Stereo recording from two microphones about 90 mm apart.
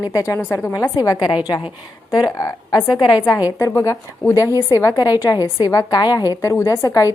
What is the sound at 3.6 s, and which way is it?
A woman's voice, 35° left (ahead or behind).